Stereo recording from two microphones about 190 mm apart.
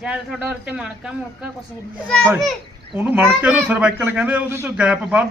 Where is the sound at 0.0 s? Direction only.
5° right (ahead or behind).